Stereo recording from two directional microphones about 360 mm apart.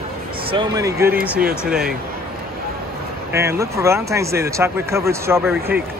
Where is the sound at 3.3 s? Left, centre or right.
Centre.